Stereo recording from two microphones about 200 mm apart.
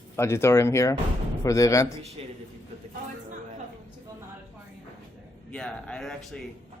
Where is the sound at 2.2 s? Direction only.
30° right (ahead or behind).